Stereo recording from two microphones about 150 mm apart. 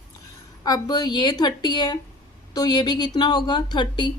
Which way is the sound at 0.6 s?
25° left (ahead or behind).